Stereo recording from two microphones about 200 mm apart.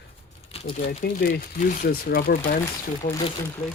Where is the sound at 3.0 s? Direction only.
40° left (ahead or behind).